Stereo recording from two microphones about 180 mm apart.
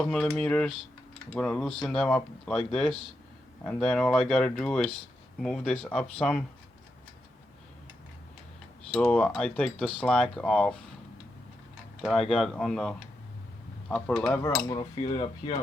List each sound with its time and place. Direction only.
0.0 s speech: 5° left (ahead or behind)
8.9 s speech: 5° left (ahead or behind)
12.0 s speech: centre (ahead or behind); by 14.8 s 15° left (ahead or behind)
14.8 s speech: 30° left (ahead or behind)